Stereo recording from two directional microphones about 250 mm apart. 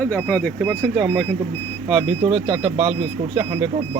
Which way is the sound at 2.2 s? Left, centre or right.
Centre.